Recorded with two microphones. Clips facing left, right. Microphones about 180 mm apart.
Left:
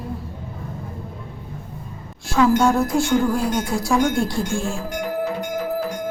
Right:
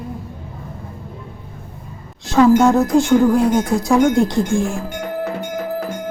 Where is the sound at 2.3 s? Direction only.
20° right (ahead or behind).